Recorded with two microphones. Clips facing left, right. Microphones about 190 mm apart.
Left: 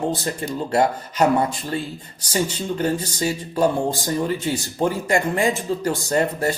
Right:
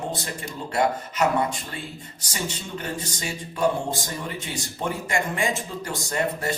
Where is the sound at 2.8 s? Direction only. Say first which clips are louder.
Left 10 dB; 35° left (ahead or behind).